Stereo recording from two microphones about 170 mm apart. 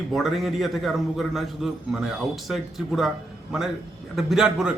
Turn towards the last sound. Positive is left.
turn(degrees=-5)  # may be behind; listen again after turning